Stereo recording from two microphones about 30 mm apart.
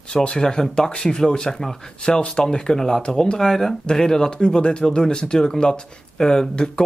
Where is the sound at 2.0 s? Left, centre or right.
Left.